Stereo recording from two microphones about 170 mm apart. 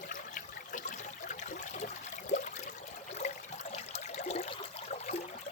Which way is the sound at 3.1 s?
40° left (ahead or behind).